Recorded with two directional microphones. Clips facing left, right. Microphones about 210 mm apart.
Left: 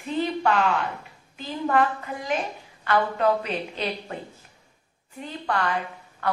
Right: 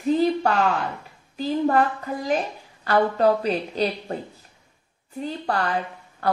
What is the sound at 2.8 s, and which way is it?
A woman's voice, 35° right (ahead or behind).